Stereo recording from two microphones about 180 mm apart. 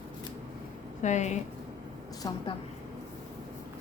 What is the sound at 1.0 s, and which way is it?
Speech, 40° left (ahead or behind).